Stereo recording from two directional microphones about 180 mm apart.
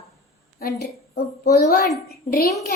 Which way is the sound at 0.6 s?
55° left (ahead or behind).